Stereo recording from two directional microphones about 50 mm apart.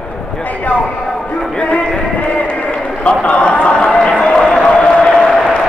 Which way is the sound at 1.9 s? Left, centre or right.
Left.